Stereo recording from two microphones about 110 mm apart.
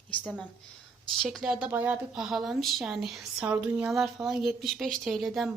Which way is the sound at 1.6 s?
15° right (ahead or behind).